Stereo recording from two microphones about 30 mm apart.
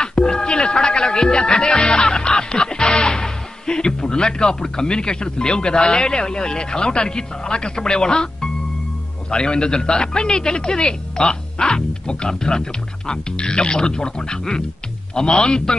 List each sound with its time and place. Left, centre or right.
0.0 s music: left
9.3 s speech: left